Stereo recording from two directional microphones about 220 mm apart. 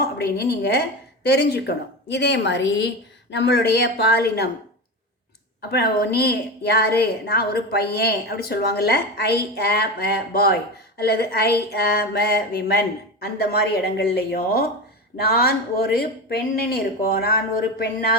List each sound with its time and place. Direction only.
0.0 s a woman's voice: 50° left (ahead or behind)
5.7 s a woman's voice: 45° left (ahead or behind)